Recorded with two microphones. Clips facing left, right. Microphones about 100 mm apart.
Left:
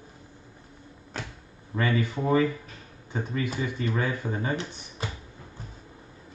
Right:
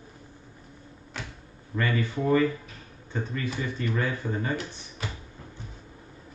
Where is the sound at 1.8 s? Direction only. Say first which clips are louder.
Left 1 dB; 15° left (ahead or behind).